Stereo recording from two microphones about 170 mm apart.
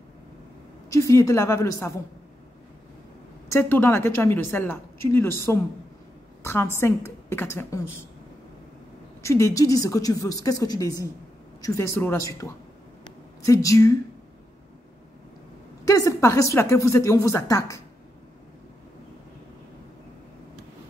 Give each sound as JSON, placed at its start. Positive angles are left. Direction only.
{"t": 0.9, "sound": "a woman's voice", "side_deg": 20}
{"t": 3.4, "sound": "a woman's voice", "side_deg": 15}
{"t": 9.2, "sound": "a woman's voice", "side_deg": 15}
{"t": 13.5, "sound": "a woman's voice", "side_deg": 20}
{"t": 15.8, "sound": "a woman's voice", "side_deg": 20}